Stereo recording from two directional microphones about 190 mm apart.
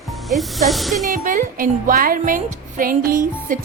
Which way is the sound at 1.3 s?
45° right (ahead or behind).